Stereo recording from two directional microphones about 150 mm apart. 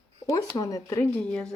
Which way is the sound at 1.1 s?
10° left (ahead or behind).